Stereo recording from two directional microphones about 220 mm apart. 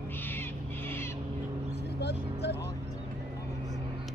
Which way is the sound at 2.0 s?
50° left (ahead or behind).